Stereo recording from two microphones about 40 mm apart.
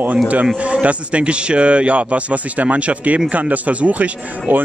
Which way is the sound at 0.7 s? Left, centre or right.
Right.